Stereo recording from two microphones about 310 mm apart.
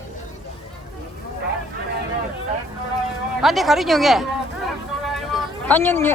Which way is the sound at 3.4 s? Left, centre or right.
Centre.